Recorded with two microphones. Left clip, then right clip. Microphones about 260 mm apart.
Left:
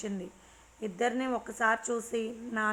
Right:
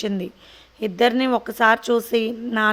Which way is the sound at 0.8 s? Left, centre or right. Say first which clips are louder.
Right 12 dB; right.